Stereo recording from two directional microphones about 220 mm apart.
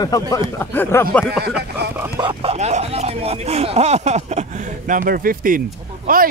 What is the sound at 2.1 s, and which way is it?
Speech, 25° right (ahead or behind).